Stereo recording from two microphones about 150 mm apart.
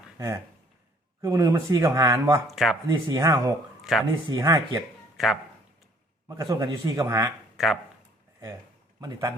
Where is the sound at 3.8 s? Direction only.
Centre (ahead or behind).